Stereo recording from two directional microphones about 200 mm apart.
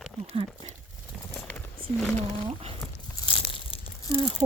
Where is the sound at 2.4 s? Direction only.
30° right (ahead or behind).